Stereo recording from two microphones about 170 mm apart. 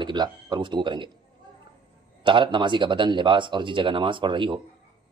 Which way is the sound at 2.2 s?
30° right (ahead or behind).